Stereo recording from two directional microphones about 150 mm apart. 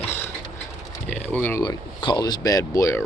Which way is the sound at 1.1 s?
10° left (ahead or behind).